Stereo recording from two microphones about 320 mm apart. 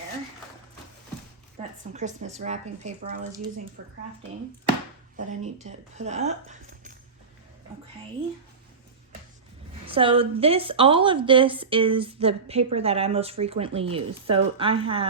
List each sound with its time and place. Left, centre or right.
1.9 s speech: right
5.1 s speech: right
9.8 s a woman's voice: centre